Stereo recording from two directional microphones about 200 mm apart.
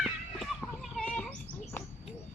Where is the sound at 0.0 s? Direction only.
Centre (ahead or behind).